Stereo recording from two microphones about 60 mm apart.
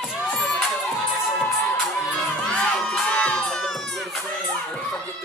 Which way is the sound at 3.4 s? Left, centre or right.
Centre.